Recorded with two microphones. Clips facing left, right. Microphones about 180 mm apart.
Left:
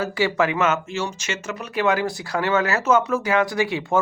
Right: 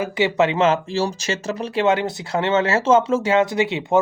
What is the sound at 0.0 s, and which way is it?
Speech, 20° right (ahead or behind).